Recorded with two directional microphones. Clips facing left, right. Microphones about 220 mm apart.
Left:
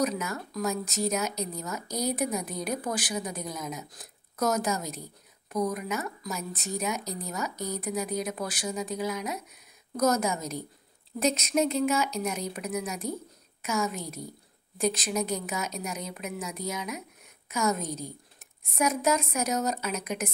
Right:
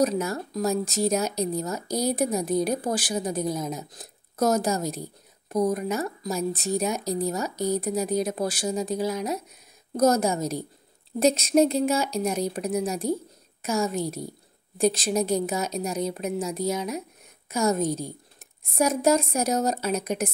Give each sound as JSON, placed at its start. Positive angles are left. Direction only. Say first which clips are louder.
{"t": 0.0, "sound": "speech", "louder": "right 5 dB", "side_deg": -30}